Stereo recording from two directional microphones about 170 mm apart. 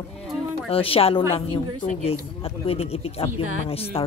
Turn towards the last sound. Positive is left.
turn(degrees=35)  # may be behind; listen again after turning